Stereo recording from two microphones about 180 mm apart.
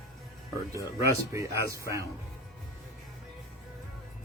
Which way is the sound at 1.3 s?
15° right (ahead or behind).